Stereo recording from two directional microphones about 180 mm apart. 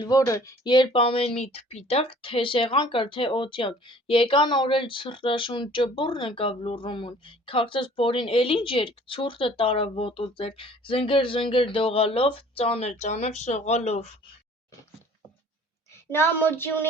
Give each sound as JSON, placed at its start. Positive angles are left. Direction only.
{"t": 0.0, "sound": "speech", "side_deg": 20}
{"t": 16.1, "sound": "speech", "side_deg": 10}